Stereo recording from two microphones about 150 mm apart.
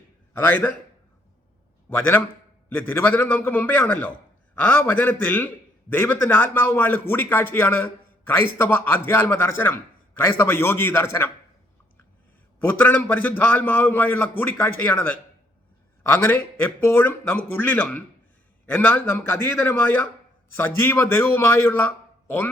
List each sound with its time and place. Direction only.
0.3 s speech: 10° left (ahead or behind)
1.9 s speech: 15° left (ahead or behind)
12.5 s speech: 10° left (ahead or behind)